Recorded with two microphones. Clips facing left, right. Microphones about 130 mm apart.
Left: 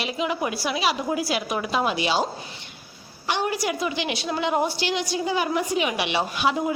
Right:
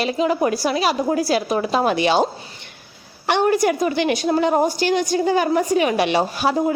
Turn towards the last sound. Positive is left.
turn(degrees=-40)  # may be behind; listen again after turning